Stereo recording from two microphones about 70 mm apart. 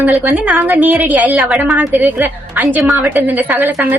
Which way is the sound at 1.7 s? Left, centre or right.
Right.